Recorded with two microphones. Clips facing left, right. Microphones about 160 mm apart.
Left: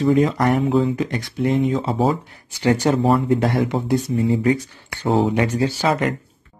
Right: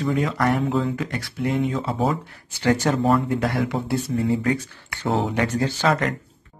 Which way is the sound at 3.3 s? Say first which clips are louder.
Left 4 dB; 25° left (ahead or behind).